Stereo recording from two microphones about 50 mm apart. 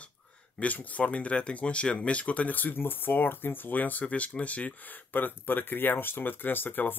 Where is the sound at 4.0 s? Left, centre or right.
Left.